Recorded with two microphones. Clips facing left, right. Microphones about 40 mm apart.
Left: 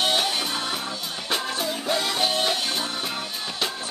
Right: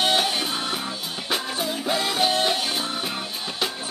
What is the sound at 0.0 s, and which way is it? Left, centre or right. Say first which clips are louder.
Music: right 2 dB; centre.